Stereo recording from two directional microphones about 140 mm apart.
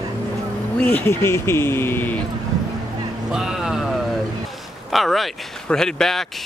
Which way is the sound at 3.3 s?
5° right (ahead or behind).